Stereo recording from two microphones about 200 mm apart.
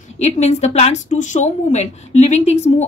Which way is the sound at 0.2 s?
35° left (ahead or behind).